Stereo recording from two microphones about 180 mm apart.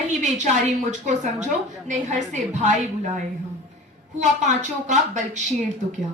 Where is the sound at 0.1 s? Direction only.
40° right (ahead or behind).